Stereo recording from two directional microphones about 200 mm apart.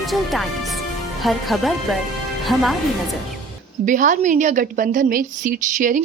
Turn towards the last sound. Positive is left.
turn(degrees=-40)  # may be behind; listen again after turning